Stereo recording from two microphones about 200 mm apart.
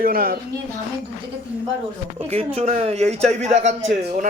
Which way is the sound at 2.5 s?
30° right (ahead or behind).